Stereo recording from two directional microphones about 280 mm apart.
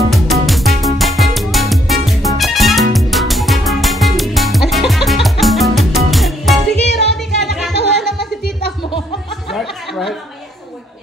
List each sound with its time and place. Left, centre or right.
0.1 s music: centre
6.7 s music: left
8.0 s music: centre
9.5 s a sound: centre